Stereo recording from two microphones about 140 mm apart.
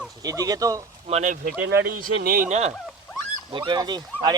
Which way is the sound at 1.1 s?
50° right (ahead or behind).